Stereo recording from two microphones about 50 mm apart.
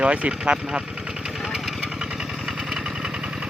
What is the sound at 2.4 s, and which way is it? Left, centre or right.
Vehicle, centre.